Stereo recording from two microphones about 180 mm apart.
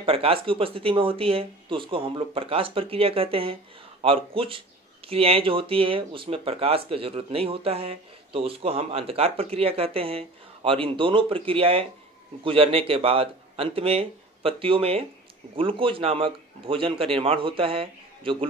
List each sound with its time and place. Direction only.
0.0 s speech: 30° right (ahead or behind)